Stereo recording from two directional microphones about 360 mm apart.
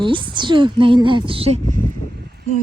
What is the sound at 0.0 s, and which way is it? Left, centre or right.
A woman's voice, centre.